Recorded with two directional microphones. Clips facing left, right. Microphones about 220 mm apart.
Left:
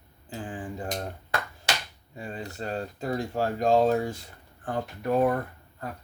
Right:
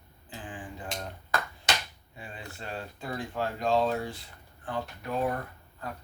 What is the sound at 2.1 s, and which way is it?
Speech, 40° left (ahead or behind).